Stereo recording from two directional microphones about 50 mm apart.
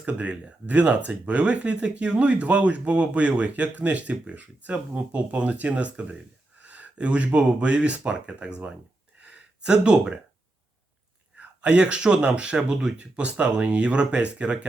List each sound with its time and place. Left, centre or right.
0.0 s speech: right
9.2 s gasp: centre
11.3 s speech: right